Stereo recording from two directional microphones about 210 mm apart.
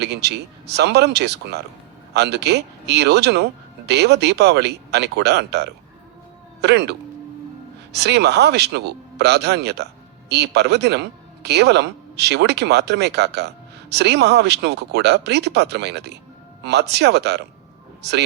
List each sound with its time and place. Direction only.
0.0 s speech: 55° right (ahead or behind)
7.9 s speech: 55° right (ahead or behind)